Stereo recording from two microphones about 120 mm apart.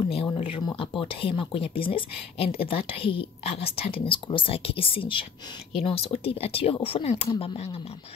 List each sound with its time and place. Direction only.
0.3 s speech: 45° left (ahead or behind)